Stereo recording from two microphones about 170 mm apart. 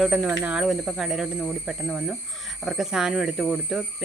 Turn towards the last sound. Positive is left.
turn(degrees=0)  # may be behind; listen again after turning